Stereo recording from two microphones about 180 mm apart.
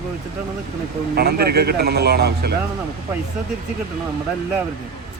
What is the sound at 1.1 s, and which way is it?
Speech, 60° right (ahead or behind).